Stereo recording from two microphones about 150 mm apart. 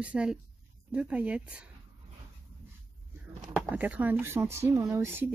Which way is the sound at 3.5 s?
10° right (ahead or behind).